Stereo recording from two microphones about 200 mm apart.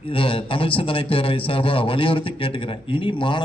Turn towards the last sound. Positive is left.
turn(degrees=25)  # may be behind; listen again after turning